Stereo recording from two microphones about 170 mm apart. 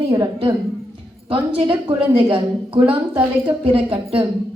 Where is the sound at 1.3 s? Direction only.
30° right (ahead or behind).